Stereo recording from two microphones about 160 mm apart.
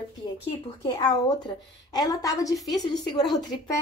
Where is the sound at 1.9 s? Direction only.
25° left (ahead or behind).